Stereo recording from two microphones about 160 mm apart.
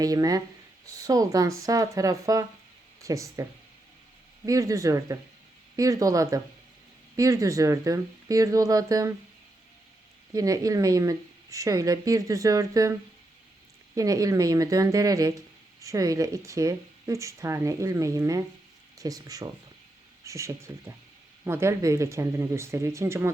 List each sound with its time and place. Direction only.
0.0 s speech: 20° right (ahead or behind)
4.4 s speech: 20° right (ahead or behind)
10.3 s speech: 20° right (ahead or behind)